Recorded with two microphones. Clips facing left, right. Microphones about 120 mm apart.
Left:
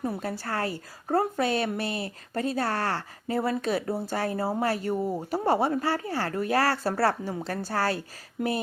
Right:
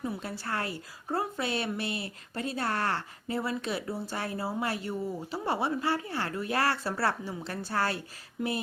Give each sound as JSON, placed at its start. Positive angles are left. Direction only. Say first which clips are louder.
{"t": 0.0, "sound": "a woman's voice", "louder": "left 4 dB", "side_deg": 40}